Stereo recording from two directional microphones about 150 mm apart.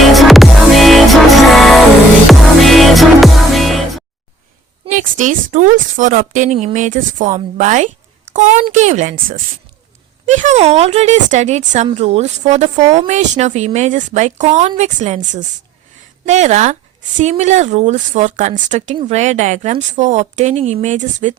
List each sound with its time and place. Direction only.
0.0 s music: centre (ahead or behind)
4.9 s a woman's voice: 60° right (ahead or behind)
10.2 s a woman's voice: 55° right (ahead or behind)